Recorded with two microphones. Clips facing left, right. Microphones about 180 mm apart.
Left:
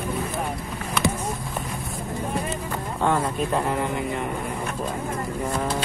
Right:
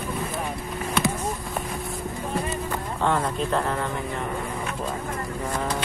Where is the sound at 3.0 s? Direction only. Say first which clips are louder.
Left 2 dB; 10° left (ahead or behind).